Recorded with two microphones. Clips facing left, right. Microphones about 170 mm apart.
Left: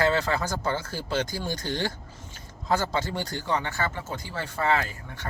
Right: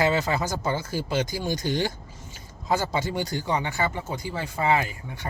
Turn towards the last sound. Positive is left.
turn(degrees=-15)  # may be behind; listen again after turning